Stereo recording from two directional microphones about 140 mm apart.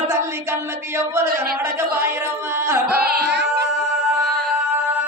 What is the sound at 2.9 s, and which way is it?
Carnatic music, 90° right.